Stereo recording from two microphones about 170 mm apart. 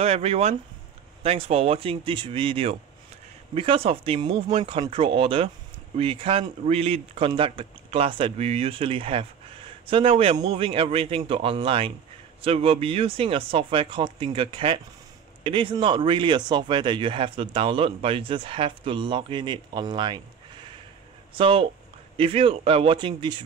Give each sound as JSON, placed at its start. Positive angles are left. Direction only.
{"t": 0.0, "sound": "speech", "side_deg": -40}
{"t": 21.4, "sound": "speech", "side_deg": -30}